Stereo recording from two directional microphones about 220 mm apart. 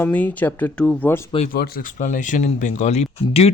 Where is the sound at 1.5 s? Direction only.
45° left (ahead or behind).